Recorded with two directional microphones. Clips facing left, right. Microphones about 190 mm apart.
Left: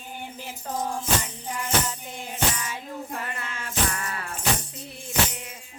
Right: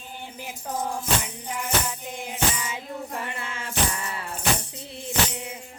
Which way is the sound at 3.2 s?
25° right (ahead or behind).